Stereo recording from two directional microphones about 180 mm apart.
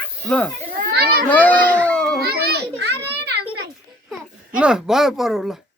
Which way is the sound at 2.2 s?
60° right (ahead or behind).